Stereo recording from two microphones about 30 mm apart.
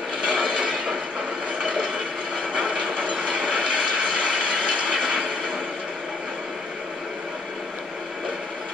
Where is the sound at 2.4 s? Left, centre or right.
Right.